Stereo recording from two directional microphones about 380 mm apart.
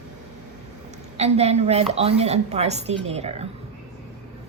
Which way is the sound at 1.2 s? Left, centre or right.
Centre.